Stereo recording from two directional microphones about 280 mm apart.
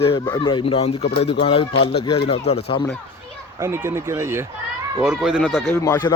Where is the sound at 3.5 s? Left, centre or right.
Centre.